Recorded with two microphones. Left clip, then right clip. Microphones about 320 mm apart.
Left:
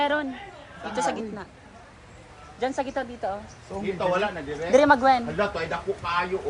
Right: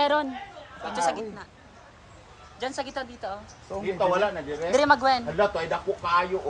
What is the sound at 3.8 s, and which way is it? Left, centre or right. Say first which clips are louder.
Speech: right 1 dB; right.